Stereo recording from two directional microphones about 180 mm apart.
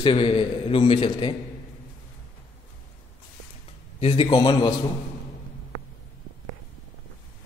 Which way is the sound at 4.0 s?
30° left (ahead or behind).